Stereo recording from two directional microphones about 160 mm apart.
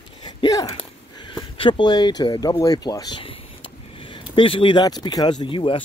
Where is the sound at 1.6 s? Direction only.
30° left (ahead or behind).